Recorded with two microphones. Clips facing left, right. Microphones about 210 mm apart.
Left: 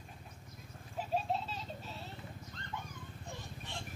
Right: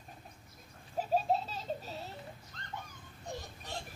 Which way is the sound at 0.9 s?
40° right (ahead or behind).